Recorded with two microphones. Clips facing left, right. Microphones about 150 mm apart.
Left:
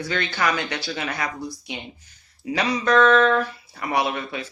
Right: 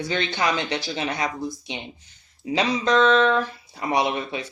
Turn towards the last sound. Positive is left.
turn(degrees=-20)  # may be behind; listen again after turning